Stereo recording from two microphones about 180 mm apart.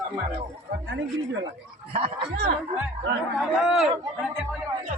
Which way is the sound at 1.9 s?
35° right (ahead or behind).